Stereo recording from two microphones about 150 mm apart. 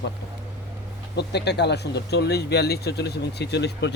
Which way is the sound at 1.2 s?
90° left.